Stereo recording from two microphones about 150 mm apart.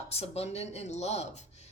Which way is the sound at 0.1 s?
45° left (ahead or behind).